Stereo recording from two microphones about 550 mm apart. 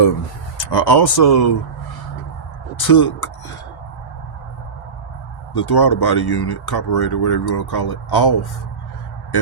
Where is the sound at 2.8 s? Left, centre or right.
Left.